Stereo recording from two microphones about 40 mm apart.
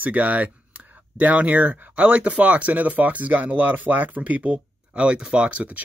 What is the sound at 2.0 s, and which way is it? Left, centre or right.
Speech, right.